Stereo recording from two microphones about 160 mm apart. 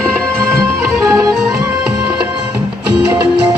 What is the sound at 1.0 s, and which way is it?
Music, 20° right (ahead or behind).